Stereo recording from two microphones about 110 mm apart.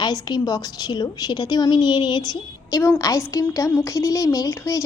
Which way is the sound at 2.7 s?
30° left (ahead or behind).